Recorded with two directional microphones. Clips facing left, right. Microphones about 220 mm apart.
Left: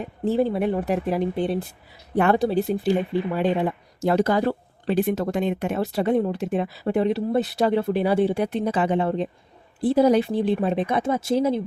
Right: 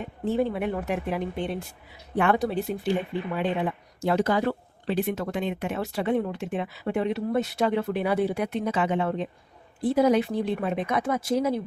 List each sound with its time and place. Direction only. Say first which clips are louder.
0.3 s speech: left 4 dB; 35° left (ahead or behind)